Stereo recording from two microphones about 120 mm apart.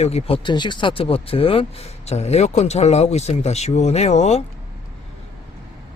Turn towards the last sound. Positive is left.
turn(degrees=65)  # may be behind; listen again after turning